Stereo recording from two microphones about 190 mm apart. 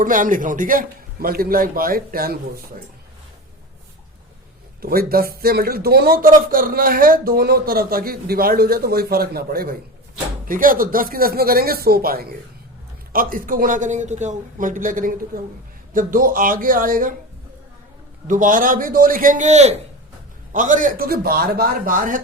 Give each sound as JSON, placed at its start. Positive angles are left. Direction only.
{"t": 0.0, "sound": "speech", "side_deg": -45}
{"t": 4.8, "sound": "speech", "side_deg": -50}
{"t": 18.3, "sound": "speech", "side_deg": -45}